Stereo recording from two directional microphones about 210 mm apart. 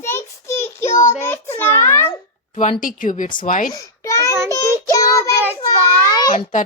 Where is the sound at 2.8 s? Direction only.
40° left (ahead or behind).